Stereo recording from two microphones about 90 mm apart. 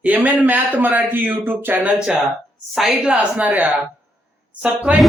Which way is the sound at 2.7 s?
5° right (ahead or behind).